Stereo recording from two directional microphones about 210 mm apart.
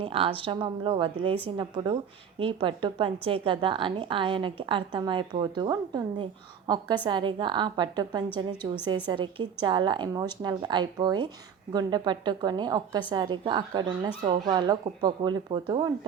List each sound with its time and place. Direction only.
0.0 s a woman's voice: 25° right (ahead or behind)